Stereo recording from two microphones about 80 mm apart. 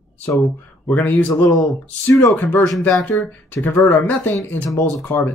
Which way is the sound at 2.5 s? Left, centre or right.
Left.